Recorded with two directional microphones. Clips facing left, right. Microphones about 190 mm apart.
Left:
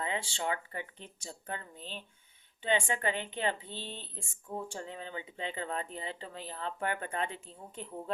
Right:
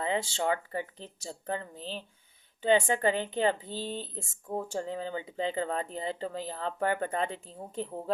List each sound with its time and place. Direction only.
0.0 s speech: 40° right (ahead or behind)